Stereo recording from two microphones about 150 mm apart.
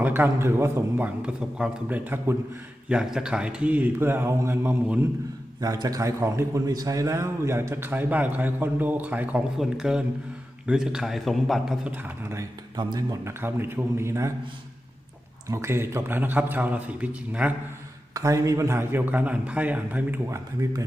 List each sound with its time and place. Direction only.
0.0 s a man's voice: 15° right (ahead or behind)
11.9 s a man's voice: 15° right (ahead or behind)
15.4 s a man's voice: 20° right (ahead or behind)
18.1 s a man's voice: 20° right (ahead or behind)